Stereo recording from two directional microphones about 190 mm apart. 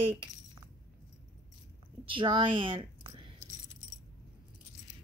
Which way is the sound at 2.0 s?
25° right (ahead or behind).